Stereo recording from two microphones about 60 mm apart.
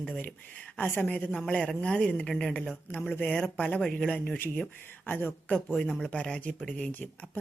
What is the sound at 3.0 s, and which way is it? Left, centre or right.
A woman's voice, left.